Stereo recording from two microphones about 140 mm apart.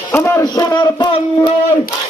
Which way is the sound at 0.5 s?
30° left (ahead or behind).